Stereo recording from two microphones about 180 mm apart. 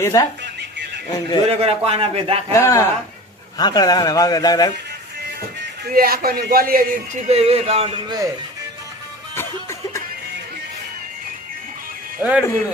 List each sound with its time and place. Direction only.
0.0 s a man's voice: 15° left (ahead or behind)
1.5 s speech: 35° right (ahead or behind)
2.5 s a man's voice: 15° left (ahead or behind)
5.9 s a man's voice: 55° right (ahead or behind)
7.3 s speech: 35° right (ahead or behind)
9.3 s music: 15° left (ahead or behind)
12.2 s speech: 5° right (ahead or behind)